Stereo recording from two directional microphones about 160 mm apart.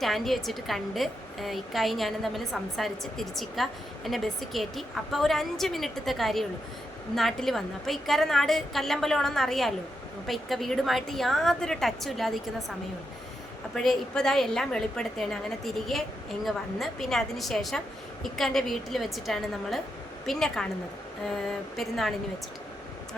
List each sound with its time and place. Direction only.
0.0 s a woman's voice: centre (ahead or behind)
13.7 s a woman's voice: 5° left (ahead or behind)